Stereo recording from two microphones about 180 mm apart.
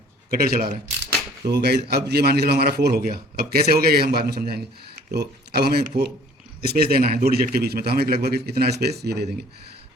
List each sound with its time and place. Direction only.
0.3 s a man's voice: 55° right (ahead or behind)
1.5 s a man's voice: 65° right (ahead or behind)